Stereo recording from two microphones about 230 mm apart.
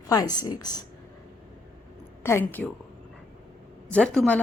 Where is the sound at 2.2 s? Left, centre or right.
Centre.